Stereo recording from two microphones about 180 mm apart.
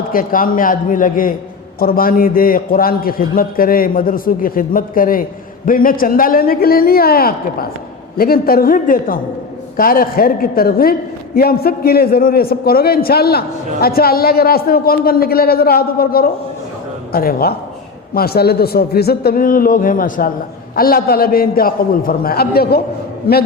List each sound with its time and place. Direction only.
0.1 s a man's voice: 50° left (ahead or behind)